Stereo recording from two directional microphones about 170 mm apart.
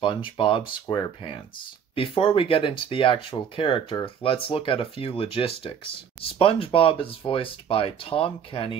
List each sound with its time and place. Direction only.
0.0 s speech: 30° left (ahead or behind)